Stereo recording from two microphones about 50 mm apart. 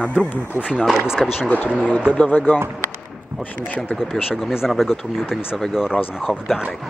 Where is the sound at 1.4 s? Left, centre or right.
Left.